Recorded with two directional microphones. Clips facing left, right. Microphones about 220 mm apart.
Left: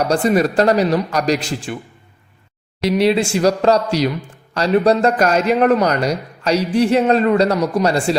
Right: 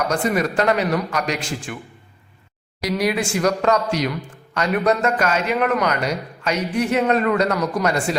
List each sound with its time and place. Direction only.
0.0 s speech: 35° left (ahead or behind)
3.0 s speech: 25° left (ahead or behind)